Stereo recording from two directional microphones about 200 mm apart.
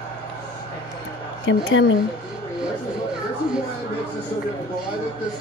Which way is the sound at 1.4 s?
70° left (ahead or behind).